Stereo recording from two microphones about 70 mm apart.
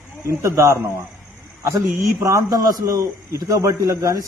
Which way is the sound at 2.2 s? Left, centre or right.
Right.